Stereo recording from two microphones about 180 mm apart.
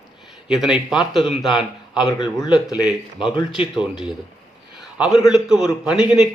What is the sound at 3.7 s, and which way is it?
Speech, 5° right (ahead or behind).